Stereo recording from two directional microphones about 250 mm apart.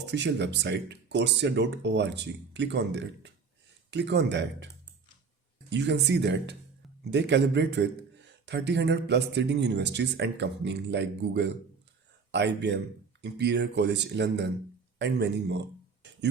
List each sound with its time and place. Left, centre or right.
0.0 s a man's voice: right
5.7 s a man's voice: right